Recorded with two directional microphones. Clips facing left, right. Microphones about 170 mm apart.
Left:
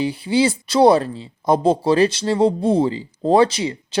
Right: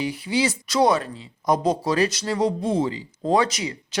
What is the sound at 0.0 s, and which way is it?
Speech, 30° left (ahead or behind).